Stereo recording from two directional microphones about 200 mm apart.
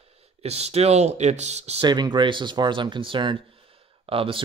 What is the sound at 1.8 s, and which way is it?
Speech, 20° right (ahead or behind).